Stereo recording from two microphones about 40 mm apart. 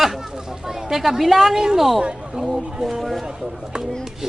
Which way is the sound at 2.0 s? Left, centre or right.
Right.